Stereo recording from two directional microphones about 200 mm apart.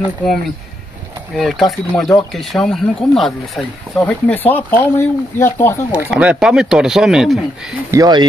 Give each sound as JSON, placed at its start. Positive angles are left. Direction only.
{"t": 1.3, "sound": "speech", "side_deg": 0}
{"t": 5.9, "sound": "speech", "side_deg": -5}
{"t": 7.9, "sound": "speech", "side_deg": -20}